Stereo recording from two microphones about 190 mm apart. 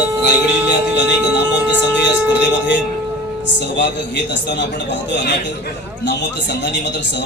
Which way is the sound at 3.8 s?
65° left (ahead or behind).